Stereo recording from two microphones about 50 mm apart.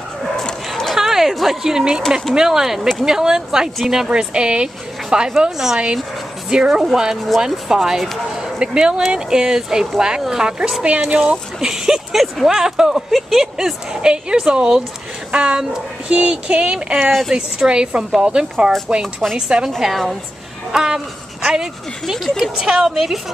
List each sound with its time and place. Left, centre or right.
0.9 s a sound: centre
2.3 s speech: centre
6.5 s speech: centre
7.3 s speech: centre
7.7 s speech: centre
14.0 s speech: centre
15.3 s child singing: right
17.3 s speech: centre
18.2 s child singing: centre
18.9 s speech: centre
19.8 s speech: centre
20.7 s speech: centre